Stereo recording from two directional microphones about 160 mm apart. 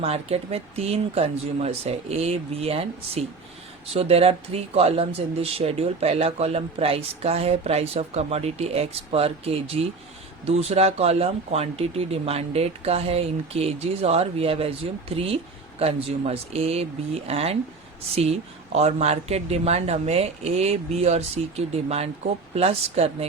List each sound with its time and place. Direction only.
0.0 s speech: 40° right (ahead or behind)